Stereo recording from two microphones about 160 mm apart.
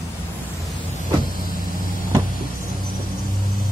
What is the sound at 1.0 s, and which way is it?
Vehicle, 60° left (ahead or behind).